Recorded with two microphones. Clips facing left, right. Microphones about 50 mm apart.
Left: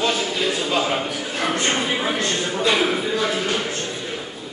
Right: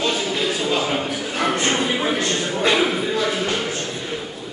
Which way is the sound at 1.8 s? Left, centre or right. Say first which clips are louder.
Right 1 dB; centre.